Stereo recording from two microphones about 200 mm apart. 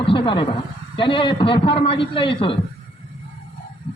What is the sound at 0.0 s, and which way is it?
A man's voice, 25° left (ahead or behind).